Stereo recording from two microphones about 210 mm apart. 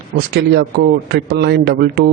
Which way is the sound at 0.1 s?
50° right (ahead or behind).